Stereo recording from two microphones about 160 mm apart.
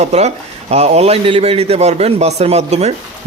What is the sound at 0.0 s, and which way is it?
A man's voice, 40° right (ahead or behind).